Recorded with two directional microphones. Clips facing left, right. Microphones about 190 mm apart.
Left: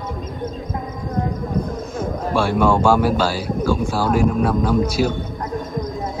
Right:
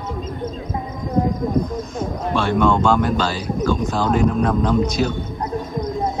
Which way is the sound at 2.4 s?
10° left (ahead or behind).